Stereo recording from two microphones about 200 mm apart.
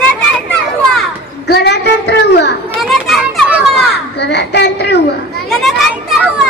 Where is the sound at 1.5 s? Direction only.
55° left (ahead or behind).